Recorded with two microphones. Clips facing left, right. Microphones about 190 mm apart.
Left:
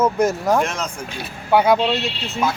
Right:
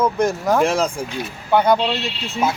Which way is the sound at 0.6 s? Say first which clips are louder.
Right 7 dB; 30° right (ahead or behind).